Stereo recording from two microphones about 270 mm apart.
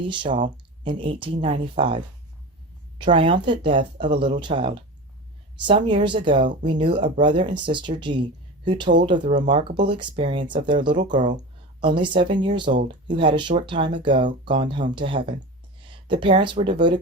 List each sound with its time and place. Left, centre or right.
0.0 s speech: centre
3.0 s speech: centre
15.8 s a sound: centre
16.2 s speech: centre